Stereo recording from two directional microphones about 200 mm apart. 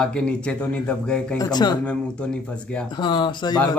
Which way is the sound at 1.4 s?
20° left (ahead or behind).